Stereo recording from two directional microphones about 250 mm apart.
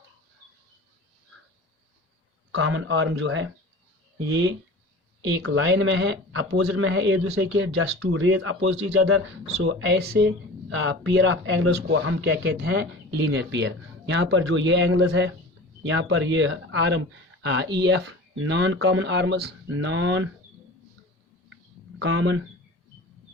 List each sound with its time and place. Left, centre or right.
2.5 s speech: right
5.4 s speech: right
9.6 s speech: right
21.9 s speech: right